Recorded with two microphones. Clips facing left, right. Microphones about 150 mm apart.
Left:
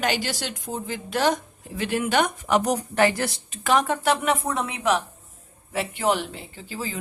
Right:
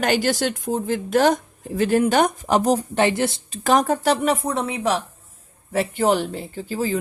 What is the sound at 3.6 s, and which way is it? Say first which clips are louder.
Speech: right 3 dB; 40° right (ahead or behind).